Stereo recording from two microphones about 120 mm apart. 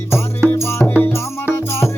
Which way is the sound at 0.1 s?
20° left (ahead or behind).